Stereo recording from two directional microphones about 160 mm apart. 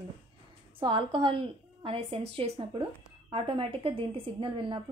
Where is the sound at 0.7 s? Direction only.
30° right (ahead or behind).